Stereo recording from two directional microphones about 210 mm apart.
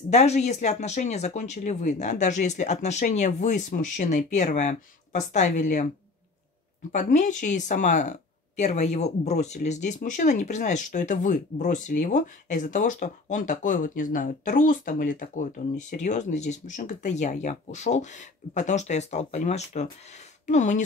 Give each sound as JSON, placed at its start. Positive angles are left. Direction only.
{"t": 0.1, "sound": "speech", "side_deg": 30}
{"t": 6.9, "sound": "speech", "side_deg": 35}